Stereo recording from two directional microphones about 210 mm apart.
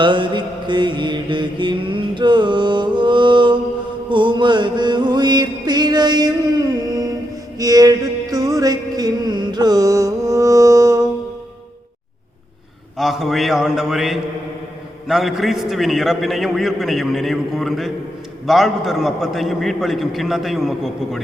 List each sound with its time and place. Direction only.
0.0 s mantra: 20° right (ahead or behind)
4.1 s music: 20° right (ahead or behind)
13.0 s a man's voice: centre (ahead or behind)